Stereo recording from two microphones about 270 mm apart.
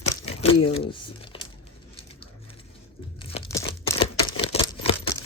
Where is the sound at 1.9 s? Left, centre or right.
Centre.